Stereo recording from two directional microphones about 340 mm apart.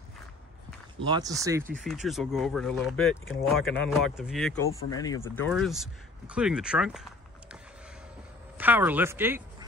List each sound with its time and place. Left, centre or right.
1.0 s speech: centre
8.5 s speech: centre